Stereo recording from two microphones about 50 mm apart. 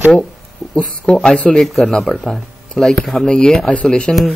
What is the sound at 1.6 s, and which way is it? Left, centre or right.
Speech, centre.